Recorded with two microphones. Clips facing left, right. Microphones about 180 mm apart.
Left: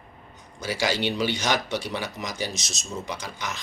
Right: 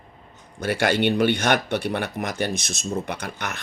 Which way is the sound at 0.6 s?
60° right (ahead or behind).